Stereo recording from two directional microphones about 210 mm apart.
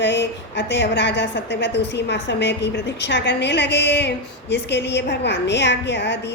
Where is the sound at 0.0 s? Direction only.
55° left (ahead or behind).